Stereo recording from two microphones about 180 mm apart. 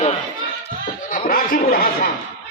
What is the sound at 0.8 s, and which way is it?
Speech, 50° left (ahead or behind).